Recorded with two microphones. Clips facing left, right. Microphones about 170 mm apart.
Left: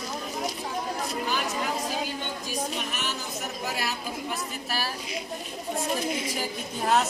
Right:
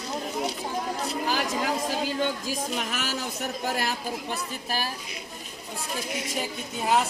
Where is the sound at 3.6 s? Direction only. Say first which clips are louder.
Right 3 dB; 50° right (ahead or behind).